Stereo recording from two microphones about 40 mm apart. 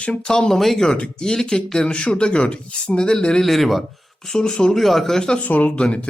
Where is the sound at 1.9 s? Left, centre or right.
Left.